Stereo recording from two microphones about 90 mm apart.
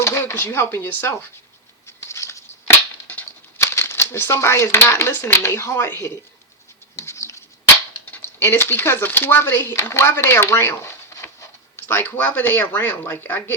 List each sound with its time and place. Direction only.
0.0 s speech: 30° left (ahead or behind)
2.0 s a sound: 30° left (ahead or behind)
5.5 s speech: 25° left (ahead or behind)
6.9 s patter: 30° left (ahead or behind)
8.0 s speech: 25° left (ahead or behind)